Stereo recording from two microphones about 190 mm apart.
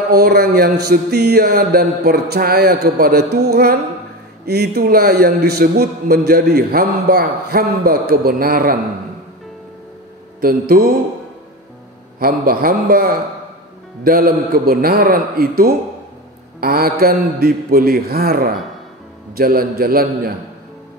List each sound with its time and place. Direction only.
0.1 s a man's voice: 55° right (ahead or behind)
10.4 s a man's voice: 50° right (ahead or behind)
12.2 s a man's voice: 50° right (ahead or behind)